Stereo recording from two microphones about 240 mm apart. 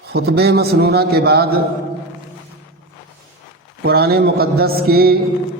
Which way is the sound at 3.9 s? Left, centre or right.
Right.